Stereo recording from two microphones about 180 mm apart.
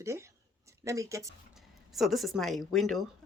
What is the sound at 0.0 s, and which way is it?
Speech, 15° right (ahead or behind).